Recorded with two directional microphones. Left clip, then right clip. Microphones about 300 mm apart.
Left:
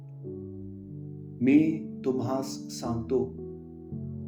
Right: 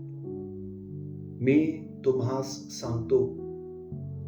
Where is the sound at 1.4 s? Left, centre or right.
Left.